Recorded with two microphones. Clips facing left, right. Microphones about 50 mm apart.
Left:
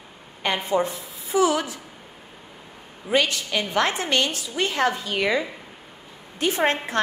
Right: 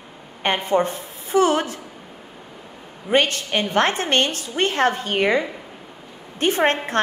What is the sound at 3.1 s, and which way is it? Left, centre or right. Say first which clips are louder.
A woman's voice: right 3 dB; right.